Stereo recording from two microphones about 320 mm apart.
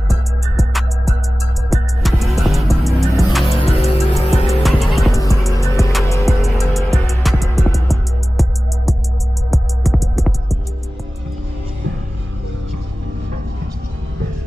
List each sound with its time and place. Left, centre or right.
0.1 s music: centre
3.4 s music: centre
4.0 s music: centre